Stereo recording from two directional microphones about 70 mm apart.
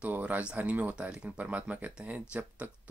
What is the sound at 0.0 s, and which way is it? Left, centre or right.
Speech, right.